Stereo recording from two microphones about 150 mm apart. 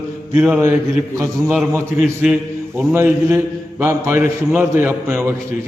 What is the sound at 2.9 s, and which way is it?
A man's voice, 15° right (ahead or behind).